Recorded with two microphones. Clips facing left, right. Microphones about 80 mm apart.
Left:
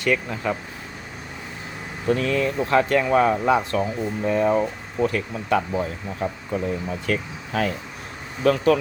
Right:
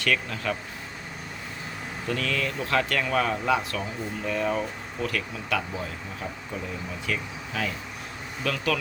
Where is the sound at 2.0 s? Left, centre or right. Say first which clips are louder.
Left 7 dB; left.